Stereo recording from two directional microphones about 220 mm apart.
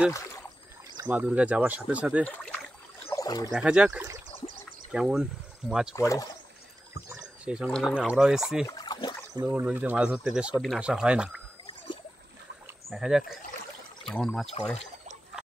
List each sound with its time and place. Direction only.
0.9 s speech: 5° right (ahead or behind)
3.0 s a sound: 15° left (ahead or behind)
3.5 s speech: 5° right (ahead or behind)
5.9 s speech: 15° left (ahead or behind)
7.1 s speech: 10° right (ahead or behind)
8.6 s a sound: 15° left (ahead or behind)
9.3 s speech: 15° right (ahead or behind)
12.6 s speech: 5° right (ahead or behind)